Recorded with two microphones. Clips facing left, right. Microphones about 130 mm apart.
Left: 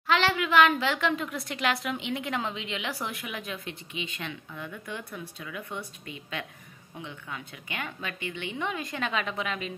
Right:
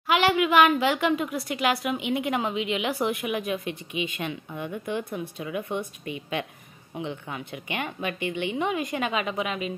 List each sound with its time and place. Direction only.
0.0 s a woman's voice: 15° right (ahead or behind)
4.5 s a woman's voice: 25° right (ahead or behind); by 9.7 s 10° right (ahead or behind)